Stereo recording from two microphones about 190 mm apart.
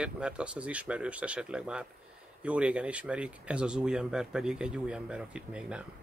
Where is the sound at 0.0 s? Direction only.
5° right (ahead or behind).